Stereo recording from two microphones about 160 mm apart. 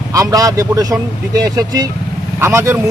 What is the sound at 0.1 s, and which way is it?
Speech, 20° right (ahead or behind).